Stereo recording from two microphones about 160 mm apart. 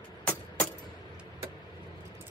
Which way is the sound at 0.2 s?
5° left (ahead or behind).